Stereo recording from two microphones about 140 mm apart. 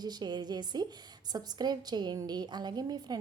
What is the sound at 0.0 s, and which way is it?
A woman's voice, 30° right (ahead or behind).